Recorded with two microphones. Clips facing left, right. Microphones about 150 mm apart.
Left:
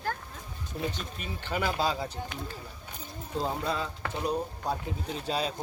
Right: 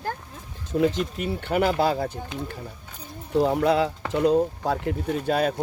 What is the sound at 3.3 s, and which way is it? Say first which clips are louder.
Speech: right 11 dB; 75° right (ahead or behind).